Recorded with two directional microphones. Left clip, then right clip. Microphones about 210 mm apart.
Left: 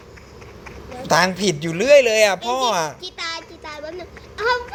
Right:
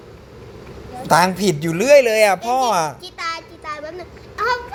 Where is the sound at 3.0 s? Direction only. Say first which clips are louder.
Right 2 dB; 25° left (ahead or behind).